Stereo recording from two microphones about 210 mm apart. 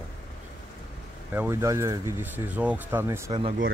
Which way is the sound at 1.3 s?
10° right (ahead or behind).